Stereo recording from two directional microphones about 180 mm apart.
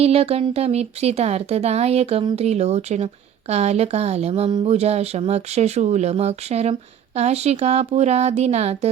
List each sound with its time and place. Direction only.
0.0 s speech: 35° right (ahead or behind)